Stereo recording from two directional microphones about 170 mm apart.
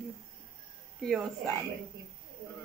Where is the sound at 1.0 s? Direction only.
Centre (ahead or behind).